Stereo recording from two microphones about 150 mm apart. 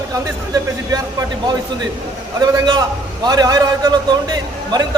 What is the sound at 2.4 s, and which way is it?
A man's voice, 25° right (ahead or behind).